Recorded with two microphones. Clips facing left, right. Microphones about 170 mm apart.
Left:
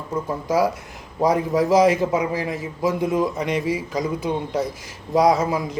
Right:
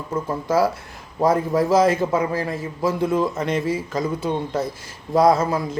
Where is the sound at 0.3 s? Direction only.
15° left (ahead or behind).